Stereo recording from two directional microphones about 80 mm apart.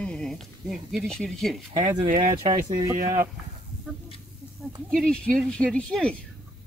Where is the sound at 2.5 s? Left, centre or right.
Right.